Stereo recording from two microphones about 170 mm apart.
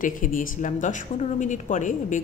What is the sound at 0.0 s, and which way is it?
A woman's voice, 50° left (ahead or behind).